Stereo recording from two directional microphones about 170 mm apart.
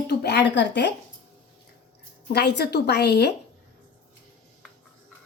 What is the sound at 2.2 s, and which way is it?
A woman's voice, 80° left.